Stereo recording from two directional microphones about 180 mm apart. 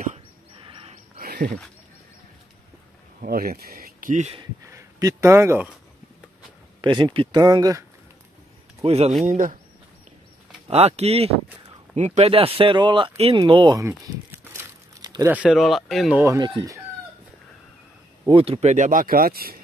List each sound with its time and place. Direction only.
1.1 s wild animals: 55° right (ahead or behind)
3.2 s speech: 55° right (ahead or behind)
4.6 s speech: 20° right (ahead or behind)
6.8 s speech: 25° right (ahead or behind)
8.8 s speech: 35° right (ahead or behind)
10.7 s speech: 35° right (ahead or behind)
13.4 s crumpling: 25° right (ahead or behind)
15.3 s speech: 5° right (ahead or behind)
16.2 s speech: 20° right (ahead or behind)
18.2 s speech: 30° right (ahead or behind); by 19.6 s 55° right (ahead or behind)